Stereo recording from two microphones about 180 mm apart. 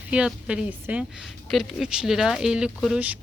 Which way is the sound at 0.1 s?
5° right (ahead or behind).